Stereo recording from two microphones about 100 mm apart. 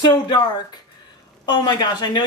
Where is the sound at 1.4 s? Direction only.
45° left (ahead or behind).